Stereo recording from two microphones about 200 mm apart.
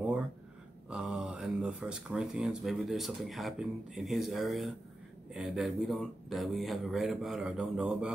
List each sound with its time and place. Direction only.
0.8 s speech: 5° right (ahead or behind)